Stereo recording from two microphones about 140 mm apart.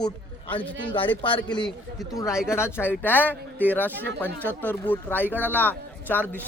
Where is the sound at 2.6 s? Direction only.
20° left (ahead or behind).